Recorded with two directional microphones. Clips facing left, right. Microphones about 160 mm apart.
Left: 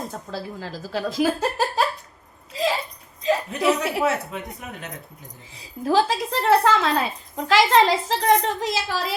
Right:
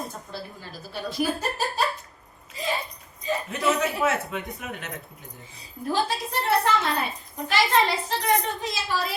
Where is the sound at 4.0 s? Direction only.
35° left (ahead or behind).